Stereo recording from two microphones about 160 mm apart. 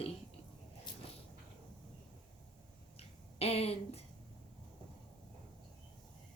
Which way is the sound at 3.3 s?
40° left (ahead or behind).